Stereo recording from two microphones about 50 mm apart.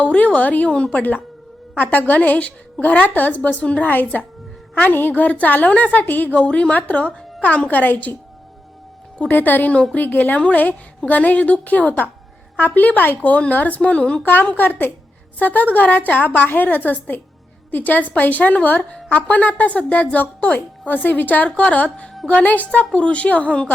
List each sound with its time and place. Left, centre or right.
0.0 s a woman's voice: left
1.8 s a woman's voice: left
9.3 s a woman's voice: left